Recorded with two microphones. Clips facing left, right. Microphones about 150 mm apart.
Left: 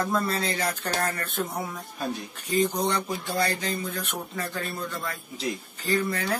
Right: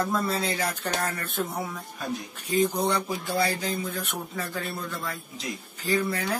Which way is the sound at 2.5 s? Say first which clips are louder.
Right 1 dB; 5° right (ahead or behind).